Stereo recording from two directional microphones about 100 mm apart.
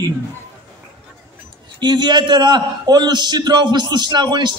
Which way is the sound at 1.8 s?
45° right (ahead or behind).